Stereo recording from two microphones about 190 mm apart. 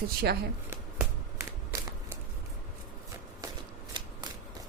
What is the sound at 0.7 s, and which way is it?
Shuffling cards, 10° right (ahead or behind).